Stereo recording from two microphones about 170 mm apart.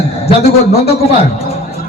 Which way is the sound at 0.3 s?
35° left (ahead or behind).